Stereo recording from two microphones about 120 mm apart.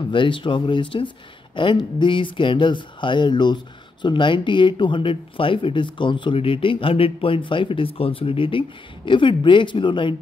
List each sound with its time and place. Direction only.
0.1 s speech: 45° left (ahead or behind)